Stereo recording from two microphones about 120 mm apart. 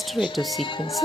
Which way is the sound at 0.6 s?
40° left (ahead or behind).